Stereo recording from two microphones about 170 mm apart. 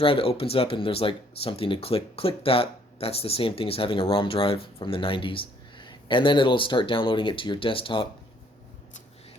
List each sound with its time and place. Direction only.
0.0 s speech: 35° left (ahead or behind)